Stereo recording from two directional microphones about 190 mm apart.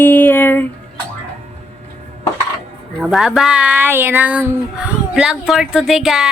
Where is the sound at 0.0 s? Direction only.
10° left (ahead or behind).